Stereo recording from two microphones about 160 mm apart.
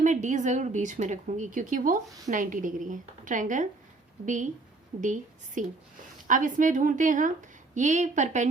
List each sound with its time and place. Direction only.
0.0 s a woman's voice: 50° right (ahead or behind)
4.9 s a woman's voice: 50° right (ahead or behind)